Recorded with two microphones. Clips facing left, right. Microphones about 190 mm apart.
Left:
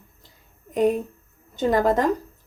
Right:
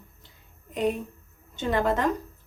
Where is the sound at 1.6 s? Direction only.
40° left (ahead or behind).